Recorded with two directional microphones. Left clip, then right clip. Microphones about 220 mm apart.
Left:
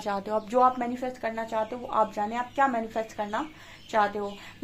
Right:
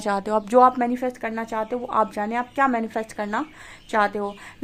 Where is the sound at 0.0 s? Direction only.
40° right (ahead or behind).